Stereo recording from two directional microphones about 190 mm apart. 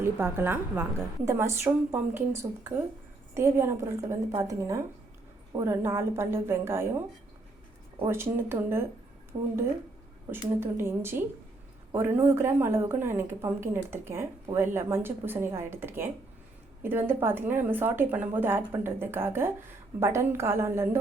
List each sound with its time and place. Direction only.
0.0 s a woman's voice: 10° right (ahead or behind)
8.0 s a woman's voice: 15° right (ahead or behind)
10.6 s a woman's voice: 10° right (ahead or behind)